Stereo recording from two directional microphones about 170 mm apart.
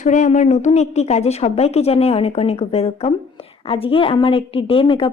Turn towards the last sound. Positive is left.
turn(degrees=30)  # may be behind; listen again after turning